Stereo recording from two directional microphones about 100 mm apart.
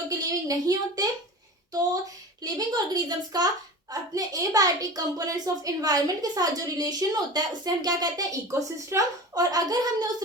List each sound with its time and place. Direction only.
0.1 s a woman's voice: 35° right (ahead or behind)
2.4 s a woman's voice: 40° right (ahead or behind)